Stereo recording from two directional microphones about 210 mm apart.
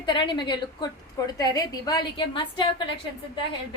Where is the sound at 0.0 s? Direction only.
20° left (ahead or behind).